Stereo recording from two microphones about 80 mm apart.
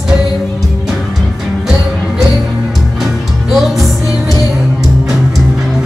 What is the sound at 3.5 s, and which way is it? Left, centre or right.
Music, centre.